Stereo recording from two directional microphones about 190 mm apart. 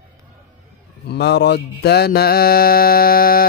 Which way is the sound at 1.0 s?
60° left (ahead or behind).